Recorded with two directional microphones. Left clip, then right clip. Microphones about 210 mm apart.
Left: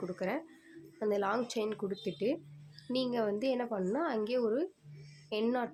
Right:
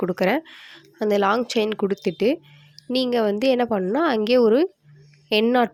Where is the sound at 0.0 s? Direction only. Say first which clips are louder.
Right 15 dB; 45° right (ahead or behind).